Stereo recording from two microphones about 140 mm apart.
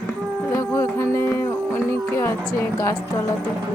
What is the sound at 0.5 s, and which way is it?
Music, 20° left (ahead or behind).